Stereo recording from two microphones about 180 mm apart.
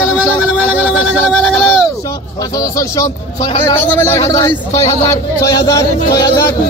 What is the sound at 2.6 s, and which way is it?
A man's voice, 20° left (ahead or behind).